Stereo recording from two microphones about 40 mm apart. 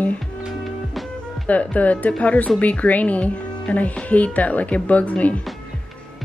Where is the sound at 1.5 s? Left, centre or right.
Left.